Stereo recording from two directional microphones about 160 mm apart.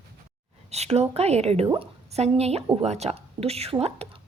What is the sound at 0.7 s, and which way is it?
A woman's voice, 40° right (ahead or behind).